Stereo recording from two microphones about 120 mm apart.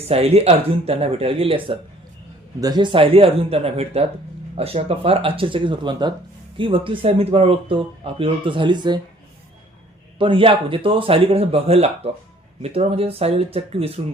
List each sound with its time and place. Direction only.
0.1 s speech: 60° right (ahead or behind)
2.6 s speech: 35° right (ahead or behind)
10.2 s speech: 45° right (ahead or behind)